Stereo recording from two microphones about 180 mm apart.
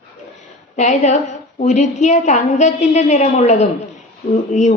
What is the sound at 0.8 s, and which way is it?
A woman's voice, 40° left (ahead or behind).